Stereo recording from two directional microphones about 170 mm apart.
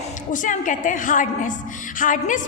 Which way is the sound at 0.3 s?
50° left (ahead or behind).